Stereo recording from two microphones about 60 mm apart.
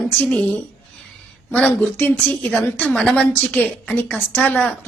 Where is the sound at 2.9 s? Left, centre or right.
Centre.